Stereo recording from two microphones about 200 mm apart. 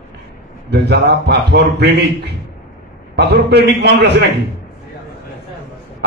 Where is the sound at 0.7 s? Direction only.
55° right (ahead or behind).